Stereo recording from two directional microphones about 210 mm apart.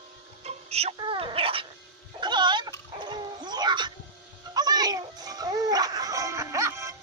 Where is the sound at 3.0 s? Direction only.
20° right (ahead or behind).